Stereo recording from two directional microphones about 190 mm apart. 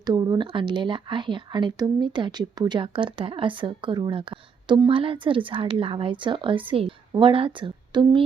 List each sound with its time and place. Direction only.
0.0 s speech: 20° right (ahead or behind)